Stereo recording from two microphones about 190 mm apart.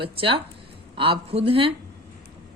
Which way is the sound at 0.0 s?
30° right (ahead or behind).